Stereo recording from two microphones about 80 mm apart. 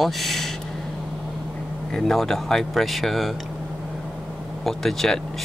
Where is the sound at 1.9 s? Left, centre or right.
Centre.